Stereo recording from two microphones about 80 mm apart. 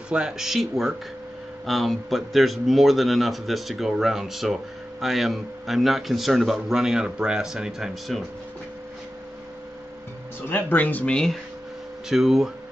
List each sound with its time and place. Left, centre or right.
0.1 s a man's voice: centre
10.5 s speech: left
12.1 s a man's voice: centre